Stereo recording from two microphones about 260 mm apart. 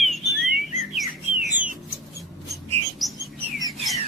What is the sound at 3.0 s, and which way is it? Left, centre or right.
Bird, centre.